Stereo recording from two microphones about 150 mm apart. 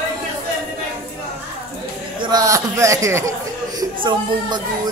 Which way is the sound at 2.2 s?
25° right (ahead or behind).